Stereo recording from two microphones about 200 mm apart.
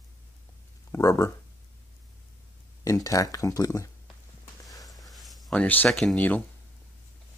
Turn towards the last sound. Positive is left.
turn(degrees=5)  # may be behind; listen again after turning